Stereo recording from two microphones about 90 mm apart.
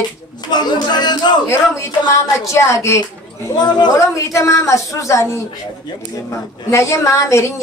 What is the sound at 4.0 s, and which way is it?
A woman's voice, 35° left (ahead or behind).